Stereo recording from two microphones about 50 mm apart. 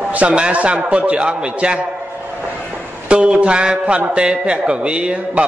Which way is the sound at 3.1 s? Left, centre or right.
Right.